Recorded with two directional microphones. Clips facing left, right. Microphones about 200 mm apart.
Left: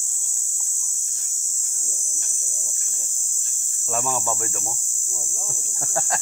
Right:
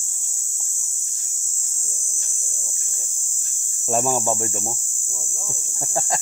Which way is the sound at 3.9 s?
40° right (ahead or behind).